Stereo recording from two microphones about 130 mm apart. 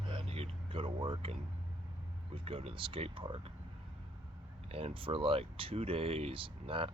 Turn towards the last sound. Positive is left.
turn(degrees=-45)  # may be behind; listen again after turning